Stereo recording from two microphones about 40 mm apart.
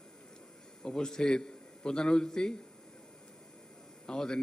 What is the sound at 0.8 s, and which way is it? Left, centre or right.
A man's voice, centre.